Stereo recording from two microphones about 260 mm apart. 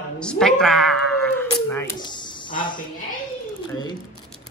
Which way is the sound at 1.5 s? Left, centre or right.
Centre.